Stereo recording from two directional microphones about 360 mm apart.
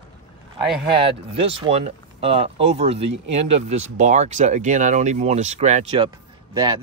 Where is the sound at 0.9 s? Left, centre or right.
Centre.